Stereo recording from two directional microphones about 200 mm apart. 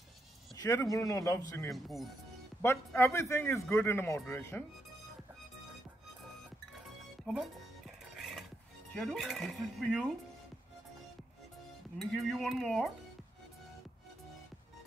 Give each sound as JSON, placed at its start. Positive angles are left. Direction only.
{"t": 0.6, "sound": "a man's voice", "side_deg": 20}
{"t": 1.7, "sound": "speech", "side_deg": 0}
{"t": 2.6, "sound": "a man's voice", "side_deg": 10}
{"t": 7.3, "sound": "speech", "side_deg": 5}
{"t": 8.2, "sound": "music", "side_deg": 0}
{"t": 8.9, "sound": "speech", "side_deg": 0}
{"t": 12.0, "sound": "speech", "side_deg": 0}